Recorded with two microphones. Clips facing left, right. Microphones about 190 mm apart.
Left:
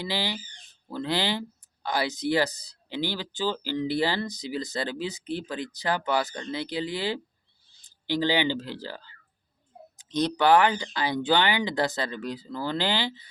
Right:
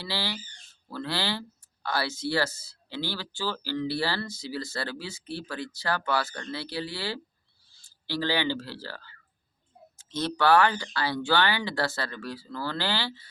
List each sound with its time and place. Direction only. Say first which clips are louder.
0.0 s speech: left 3 dB; 15° left (ahead or behind)